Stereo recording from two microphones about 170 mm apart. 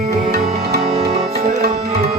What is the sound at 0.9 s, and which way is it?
Music, 25° right (ahead or behind).